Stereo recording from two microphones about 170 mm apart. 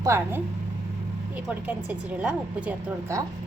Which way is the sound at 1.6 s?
10° right (ahead or behind).